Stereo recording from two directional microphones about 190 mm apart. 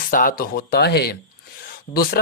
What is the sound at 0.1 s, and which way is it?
Speech, 45° left (ahead or behind).